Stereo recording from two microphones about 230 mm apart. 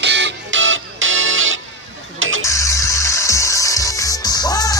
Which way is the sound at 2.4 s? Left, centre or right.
Centre.